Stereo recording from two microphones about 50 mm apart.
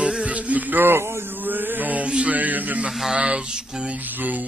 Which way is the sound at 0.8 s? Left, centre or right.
Right.